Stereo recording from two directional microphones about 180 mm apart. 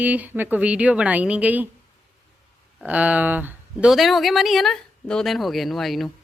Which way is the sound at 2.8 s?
10° right (ahead or behind).